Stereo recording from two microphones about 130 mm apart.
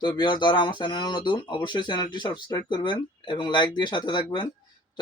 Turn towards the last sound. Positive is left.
turn(degrees=35)  # may be behind; listen again after turning